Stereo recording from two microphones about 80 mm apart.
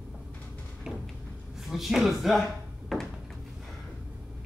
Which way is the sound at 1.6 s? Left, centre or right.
Centre.